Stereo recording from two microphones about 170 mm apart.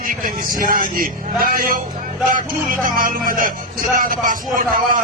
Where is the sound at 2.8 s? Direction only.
55° right (ahead or behind).